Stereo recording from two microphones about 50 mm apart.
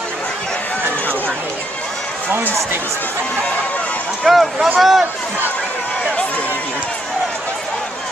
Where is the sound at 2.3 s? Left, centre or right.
Right.